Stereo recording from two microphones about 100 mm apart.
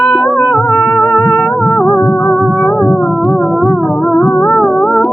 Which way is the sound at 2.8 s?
15° left (ahead or behind).